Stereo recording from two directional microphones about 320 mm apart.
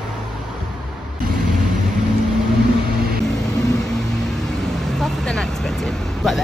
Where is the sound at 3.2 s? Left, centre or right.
Centre.